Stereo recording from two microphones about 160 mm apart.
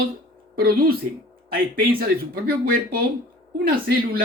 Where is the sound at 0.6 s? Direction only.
70° right (ahead or behind).